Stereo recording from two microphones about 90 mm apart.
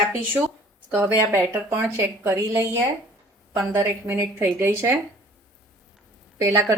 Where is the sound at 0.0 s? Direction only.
15° right (ahead or behind); by 2.6 s 35° right (ahead or behind).